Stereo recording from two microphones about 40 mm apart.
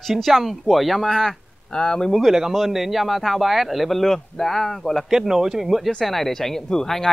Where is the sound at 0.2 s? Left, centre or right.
Centre.